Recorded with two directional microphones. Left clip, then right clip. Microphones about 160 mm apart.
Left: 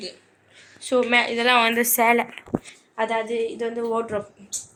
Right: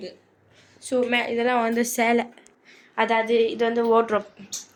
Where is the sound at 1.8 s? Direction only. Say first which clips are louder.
Left 3 dB; 40° right (ahead or behind).